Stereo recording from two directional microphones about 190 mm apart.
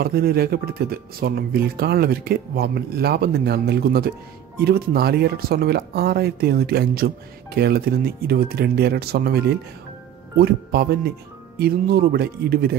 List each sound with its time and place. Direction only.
0.0 s speech: 55° right (ahead or behind)
10.4 s speech: 55° right (ahead or behind)